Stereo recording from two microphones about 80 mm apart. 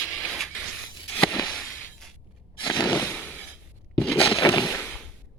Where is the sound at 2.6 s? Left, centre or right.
Left.